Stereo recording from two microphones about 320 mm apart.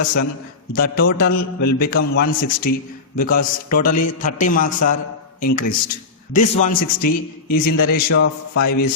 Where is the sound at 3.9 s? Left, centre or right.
Left.